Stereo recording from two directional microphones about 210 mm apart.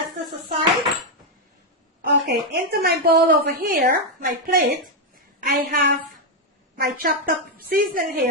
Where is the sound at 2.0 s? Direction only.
50° right (ahead or behind).